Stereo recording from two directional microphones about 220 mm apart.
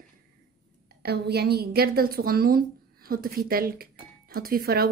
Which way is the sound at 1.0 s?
50° right (ahead or behind).